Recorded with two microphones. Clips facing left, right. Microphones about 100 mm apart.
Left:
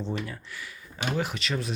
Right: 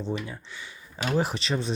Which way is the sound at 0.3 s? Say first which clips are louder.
Even; 25° right (ahead or behind).